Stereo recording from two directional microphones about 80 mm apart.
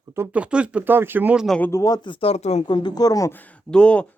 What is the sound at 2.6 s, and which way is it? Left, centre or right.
Speech, left.